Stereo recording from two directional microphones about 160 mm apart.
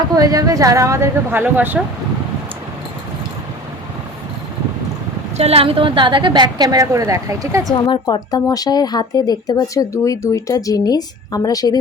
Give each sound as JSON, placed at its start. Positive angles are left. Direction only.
{"t": 0.1, "sound": "a woman's voice", "side_deg": -20}
{"t": 5.4, "sound": "a woman's voice", "side_deg": -40}
{"t": 7.7, "sound": "speech", "side_deg": 25}